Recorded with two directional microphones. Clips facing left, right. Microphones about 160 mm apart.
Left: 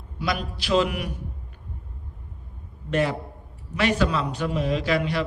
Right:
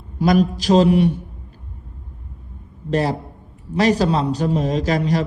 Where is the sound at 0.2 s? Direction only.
40° right (ahead or behind).